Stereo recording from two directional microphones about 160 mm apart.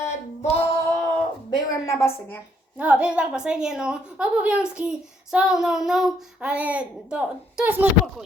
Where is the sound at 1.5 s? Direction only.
20° left (ahead or behind).